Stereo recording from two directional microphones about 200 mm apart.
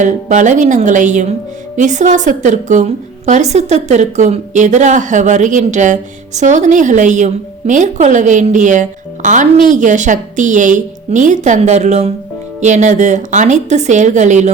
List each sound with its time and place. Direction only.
0.0 s a woman's voice: 40° right (ahead or behind)